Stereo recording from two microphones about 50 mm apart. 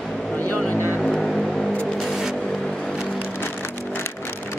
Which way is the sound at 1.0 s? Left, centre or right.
Centre.